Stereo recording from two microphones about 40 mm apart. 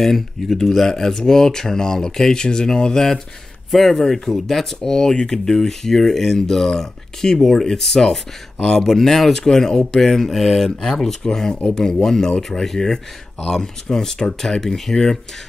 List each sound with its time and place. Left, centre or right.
0.0 s speech: centre
9.9 s mantra: centre
10.8 s speech: centre